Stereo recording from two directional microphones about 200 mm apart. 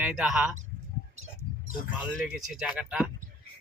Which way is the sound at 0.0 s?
5° right (ahead or behind).